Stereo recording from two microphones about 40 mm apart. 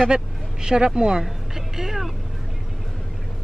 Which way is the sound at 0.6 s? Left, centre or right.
Centre.